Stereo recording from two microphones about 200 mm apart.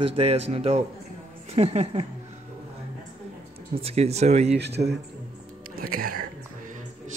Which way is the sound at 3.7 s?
30° right (ahead or behind).